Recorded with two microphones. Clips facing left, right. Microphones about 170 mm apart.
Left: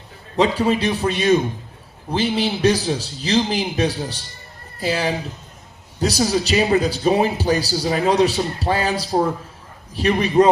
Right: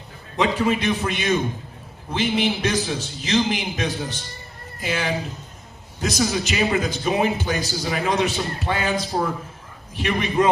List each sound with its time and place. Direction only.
0.3 s speech: 35° left (ahead or behind)